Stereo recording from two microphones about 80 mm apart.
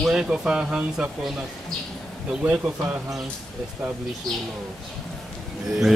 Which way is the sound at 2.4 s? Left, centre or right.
Right.